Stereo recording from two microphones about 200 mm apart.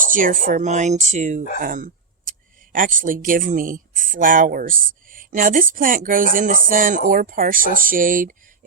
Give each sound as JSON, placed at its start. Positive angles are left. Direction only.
{"t": 0.0, "sound": "speech", "side_deg": -40}
{"t": 1.6, "sound": "a sound", "side_deg": -45}
{"t": 2.7, "sound": "speech", "side_deg": -45}